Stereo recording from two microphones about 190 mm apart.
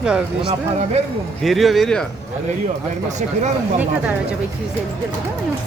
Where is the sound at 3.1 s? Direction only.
40° right (ahead or behind).